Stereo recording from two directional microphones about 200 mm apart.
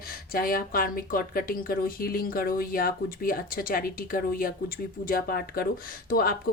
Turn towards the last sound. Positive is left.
turn(degrees=45)  # may be behind; listen again after turning